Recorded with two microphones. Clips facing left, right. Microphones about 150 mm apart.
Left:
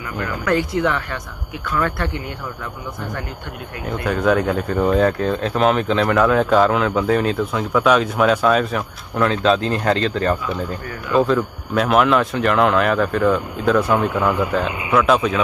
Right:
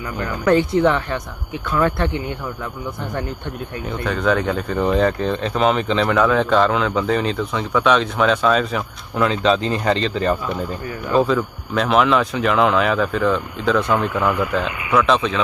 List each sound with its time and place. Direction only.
0.2 s speech: 25° right (ahead or behind)
4.0 s speech: 5° left (ahead or behind)